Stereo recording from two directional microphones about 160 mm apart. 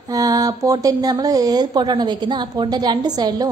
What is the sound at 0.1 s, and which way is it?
A woman's voice, 20° right (ahead or behind).